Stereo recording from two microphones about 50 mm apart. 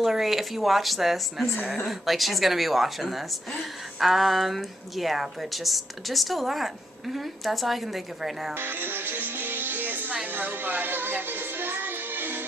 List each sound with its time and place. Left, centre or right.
0.0 s a woman's voice: centre
8.5 s music: right